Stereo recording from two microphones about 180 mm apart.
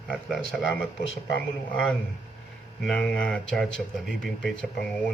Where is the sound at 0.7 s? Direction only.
90° left.